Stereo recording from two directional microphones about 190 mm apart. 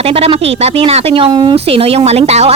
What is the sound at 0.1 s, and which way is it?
Speech, 30° right (ahead or behind).